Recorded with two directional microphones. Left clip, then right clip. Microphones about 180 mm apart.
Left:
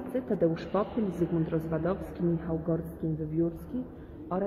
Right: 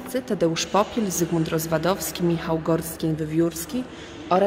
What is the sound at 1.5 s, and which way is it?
Speech, 80° right.